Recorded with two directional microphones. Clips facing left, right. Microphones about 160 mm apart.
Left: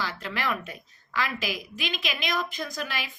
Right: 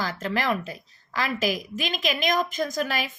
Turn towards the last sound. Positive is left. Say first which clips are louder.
# right 7 dB
turn(degrees=-45)  # may be behind; listen again after turning